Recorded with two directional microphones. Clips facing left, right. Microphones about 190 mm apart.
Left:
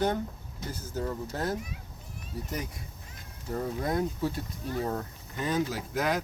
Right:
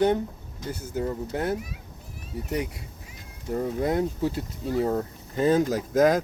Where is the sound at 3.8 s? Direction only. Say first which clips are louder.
Right 3 dB; 25° right (ahead or behind).